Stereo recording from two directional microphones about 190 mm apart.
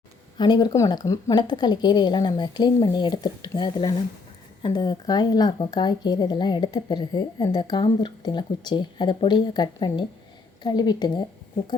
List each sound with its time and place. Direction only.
0.3 s speech: 20° left (ahead or behind)